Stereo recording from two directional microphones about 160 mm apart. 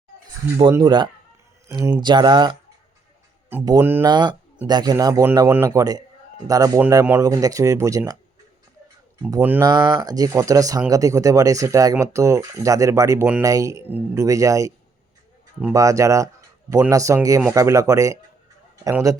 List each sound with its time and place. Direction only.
0.8 s speech: 30° right (ahead or behind)
3.8 s speech: 15° right (ahead or behind)
4.0 s speech: 25° right (ahead or behind)
7.0 s speech: 10° right (ahead or behind)
9.4 s speech: 10° right (ahead or behind)
9.6 s speech: 25° right (ahead or behind)
15.7 s speech: 20° right (ahead or behind)